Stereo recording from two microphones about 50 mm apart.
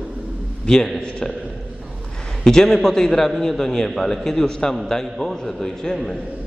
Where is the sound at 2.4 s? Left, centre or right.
Centre.